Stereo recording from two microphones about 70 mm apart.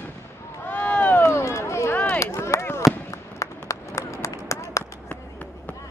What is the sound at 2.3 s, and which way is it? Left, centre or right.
Chop, left.